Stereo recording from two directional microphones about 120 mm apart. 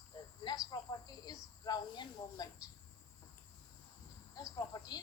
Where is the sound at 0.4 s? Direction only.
35° left (ahead or behind).